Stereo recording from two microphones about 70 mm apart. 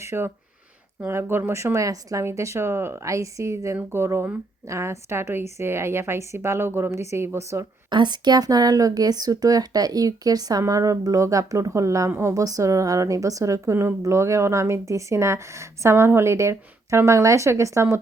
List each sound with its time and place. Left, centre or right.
0.0 s a woman's voice: right
7.6 s a woman's voice: right
10.6 s a woman's voice: right
12.3 s a woman's voice: right